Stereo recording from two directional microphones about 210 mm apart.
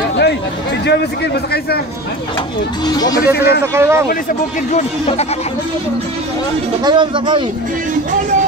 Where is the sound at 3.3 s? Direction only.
50° left (ahead or behind).